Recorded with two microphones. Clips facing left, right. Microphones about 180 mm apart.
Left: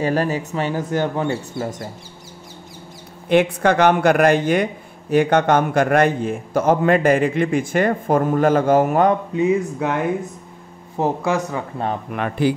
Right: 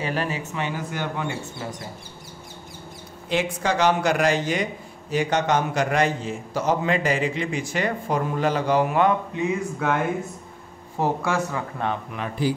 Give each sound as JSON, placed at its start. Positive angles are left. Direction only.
{"t": 0.0, "sound": "speech", "side_deg": 40}
{"t": 3.3, "sound": "a man's voice", "side_deg": 55}
{"t": 9.3, "sound": "speech", "side_deg": 20}
{"t": 12.1, "sound": "speech", "side_deg": 65}